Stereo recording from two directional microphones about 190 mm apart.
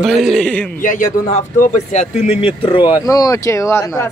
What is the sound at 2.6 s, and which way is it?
Speech, 25° left (ahead or behind).